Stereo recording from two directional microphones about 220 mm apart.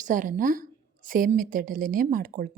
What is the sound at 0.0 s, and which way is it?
Speech, 35° right (ahead or behind).